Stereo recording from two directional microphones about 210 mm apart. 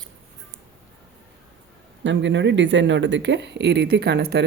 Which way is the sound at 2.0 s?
60° right (ahead or behind).